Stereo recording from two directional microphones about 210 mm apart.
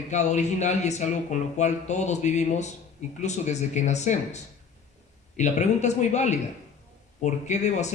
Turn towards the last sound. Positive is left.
turn(degrees=35)  # may be behind; listen again after turning